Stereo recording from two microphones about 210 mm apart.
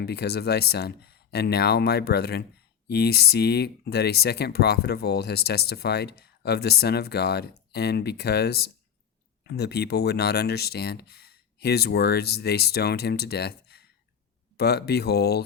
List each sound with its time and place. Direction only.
0.0 s speech: 50° left (ahead or behind)